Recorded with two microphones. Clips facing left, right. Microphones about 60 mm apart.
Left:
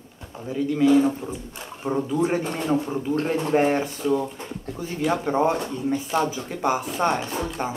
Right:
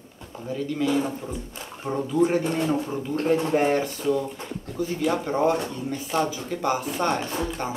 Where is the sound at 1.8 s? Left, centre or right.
Centre.